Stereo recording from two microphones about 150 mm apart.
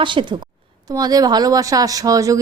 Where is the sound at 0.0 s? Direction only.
30° right (ahead or behind).